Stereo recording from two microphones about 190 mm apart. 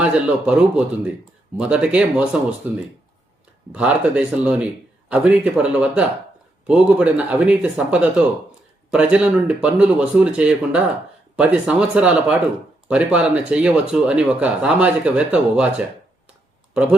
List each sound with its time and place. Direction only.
0.0 s a man's voice: 5° right (ahead or behind)